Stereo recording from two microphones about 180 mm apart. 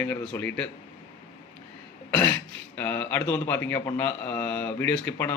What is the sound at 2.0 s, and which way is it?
Speech, 10° left (ahead or behind).